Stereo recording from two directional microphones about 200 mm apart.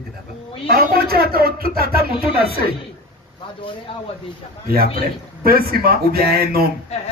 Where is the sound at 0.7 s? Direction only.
50° right (ahead or behind).